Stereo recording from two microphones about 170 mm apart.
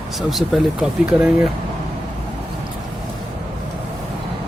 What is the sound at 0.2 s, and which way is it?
Speech, centre (ahead or behind).